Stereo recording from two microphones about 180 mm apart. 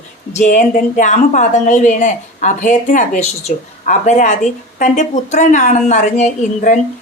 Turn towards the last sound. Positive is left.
turn(degrees=40)  # may be behind; listen again after turning